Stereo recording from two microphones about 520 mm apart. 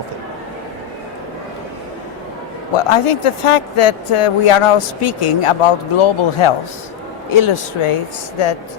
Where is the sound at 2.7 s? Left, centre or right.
Left.